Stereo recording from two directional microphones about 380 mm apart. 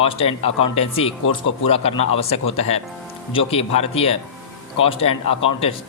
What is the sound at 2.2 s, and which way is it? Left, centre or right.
Speech, centre.